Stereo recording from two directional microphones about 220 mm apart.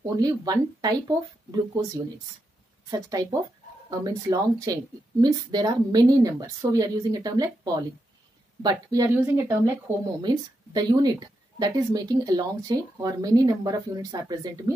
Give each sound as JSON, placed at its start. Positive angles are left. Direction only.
{"t": 0.0, "sound": "speech", "side_deg": -15}
{"t": 2.9, "sound": "speech", "side_deg": -15}